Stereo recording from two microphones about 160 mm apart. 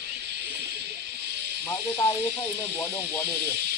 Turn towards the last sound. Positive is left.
turn(degrees=15)  # may be behind; listen again after turning